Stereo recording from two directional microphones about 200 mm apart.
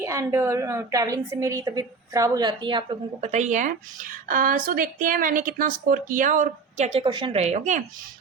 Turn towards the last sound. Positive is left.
turn(degrees=-35)  # may be behind; listen again after turning